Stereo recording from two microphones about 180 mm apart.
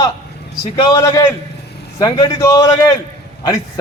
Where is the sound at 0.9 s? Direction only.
15° left (ahead or behind).